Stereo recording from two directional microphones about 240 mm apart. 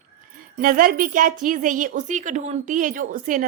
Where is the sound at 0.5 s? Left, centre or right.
Right.